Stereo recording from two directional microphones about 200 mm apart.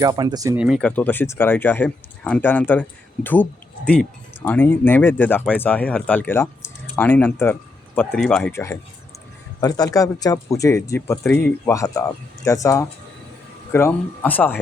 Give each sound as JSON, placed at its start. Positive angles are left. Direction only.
{"t": 0.0, "sound": "speech", "side_deg": -20}
{"t": 0.6, "sound": "speech", "side_deg": 0}
{"t": 3.8, "sound": "speech", "side_deg": 5}